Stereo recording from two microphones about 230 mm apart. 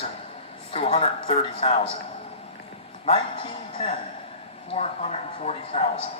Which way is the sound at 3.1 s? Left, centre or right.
Left.